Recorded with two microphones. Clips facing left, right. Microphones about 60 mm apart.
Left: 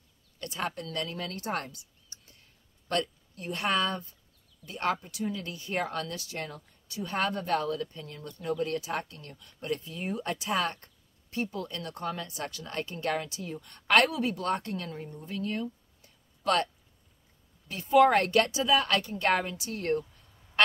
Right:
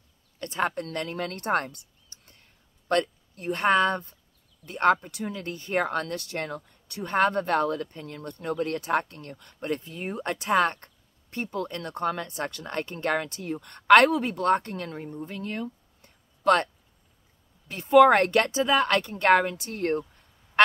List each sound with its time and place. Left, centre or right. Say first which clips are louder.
0.4 s speech: right 6 dB; right
2.2 s a sound: right 2 dB; right
4.6 s speech: right 8 dB; right
10.2 s speech: right 8 dB; right
15.1 s a sound: left 1 dB; right
17.8 s speech: right 5 dB; right